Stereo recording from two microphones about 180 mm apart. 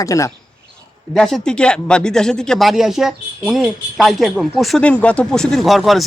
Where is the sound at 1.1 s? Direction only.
Centre (ahead or behind).